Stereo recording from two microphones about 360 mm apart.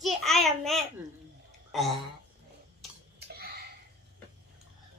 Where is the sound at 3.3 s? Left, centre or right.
Right.